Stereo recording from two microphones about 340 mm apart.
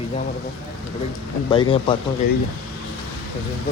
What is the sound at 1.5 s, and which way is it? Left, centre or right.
Speech, centre.